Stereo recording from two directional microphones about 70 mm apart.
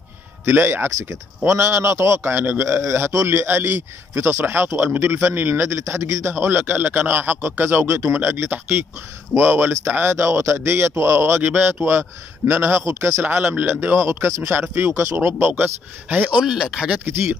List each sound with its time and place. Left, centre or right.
0.5 s speech: right
6.3 s speech: right
11.4 s speech: right
13.2 s speech: right
15.1 s speech: right
16.3 s speech: centre
17.0 s speech: right